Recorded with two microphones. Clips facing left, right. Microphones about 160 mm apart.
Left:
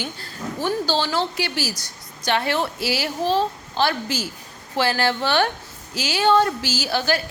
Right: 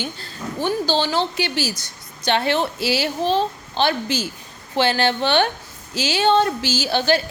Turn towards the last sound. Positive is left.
turn(degrees=-25)  # may be behind; listen again after turning